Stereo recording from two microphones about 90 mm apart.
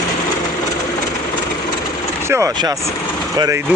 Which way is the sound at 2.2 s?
30° right (ahead or behind).